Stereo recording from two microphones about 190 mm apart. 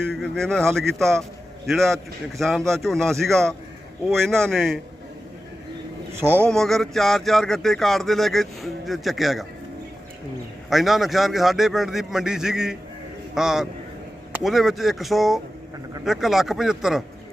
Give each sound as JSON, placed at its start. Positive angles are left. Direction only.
{"t": 0.1, "sound": "speech", "side_deg": 5}
{"t": 6.1, "sound": "a man's voice", "side_deg": -10}
{"t": 6.5, "sound": "speech", "side_deg": 0}
{"t": 10.7, "sound": "speech", "side_deg": 0}